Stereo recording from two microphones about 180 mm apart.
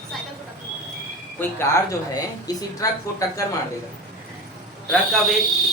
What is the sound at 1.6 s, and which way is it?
Speech, 15° left (ahead or behind).